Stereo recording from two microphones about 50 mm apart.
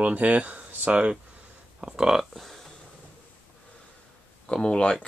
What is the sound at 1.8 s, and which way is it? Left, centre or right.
Speech, centre.